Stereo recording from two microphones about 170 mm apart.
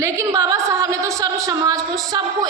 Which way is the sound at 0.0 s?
20° right (ahead or behind).